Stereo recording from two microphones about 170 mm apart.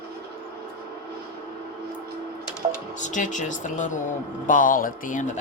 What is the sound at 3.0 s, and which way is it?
Speech, 45° left (ahead or behind).